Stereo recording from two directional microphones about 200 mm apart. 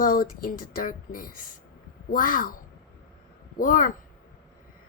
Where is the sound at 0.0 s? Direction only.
45° left (ahead or behind).